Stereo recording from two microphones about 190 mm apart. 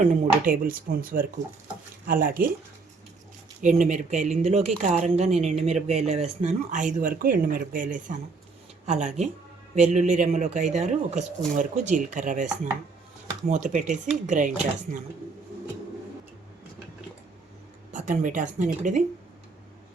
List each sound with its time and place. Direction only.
0.0 s speech: 45° right (ahead or behind)
3.6 s speech: 40° right (ahead or behind)
13.5 s speech: 40° right (ahead or behind)
17.9 s speech: 40° right (ahead or behind)